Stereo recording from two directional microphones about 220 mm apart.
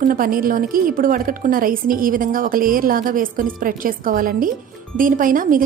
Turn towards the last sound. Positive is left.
turn(degrees=-40)  # may be behind; listen again after turning